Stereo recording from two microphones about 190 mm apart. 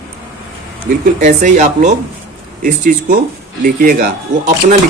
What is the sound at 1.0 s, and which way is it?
A man's voice, 40° right (ahead or behind).